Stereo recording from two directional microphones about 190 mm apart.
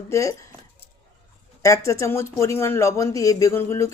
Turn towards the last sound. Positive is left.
turn(degrees=15)  # may be behind; listen again after turning